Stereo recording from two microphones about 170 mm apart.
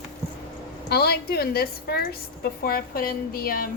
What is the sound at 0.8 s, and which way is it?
A woman's voice, 70° left (ahead or behind).